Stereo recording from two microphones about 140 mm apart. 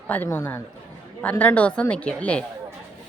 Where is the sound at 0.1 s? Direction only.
15° left (ahead or behind).